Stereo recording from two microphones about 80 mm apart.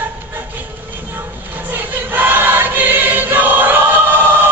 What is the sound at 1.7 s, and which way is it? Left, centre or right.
Choir, right.